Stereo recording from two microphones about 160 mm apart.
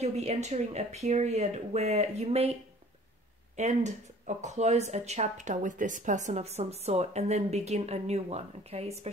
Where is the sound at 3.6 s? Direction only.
45° right (ahead or behind).